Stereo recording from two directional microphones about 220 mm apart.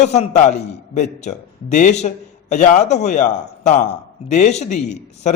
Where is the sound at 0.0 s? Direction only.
30° left (ahead or behind).